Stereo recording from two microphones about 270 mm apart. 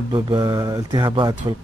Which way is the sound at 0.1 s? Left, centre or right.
Centre.